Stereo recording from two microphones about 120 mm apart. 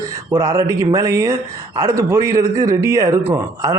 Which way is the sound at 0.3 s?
25° right (ahead or behind).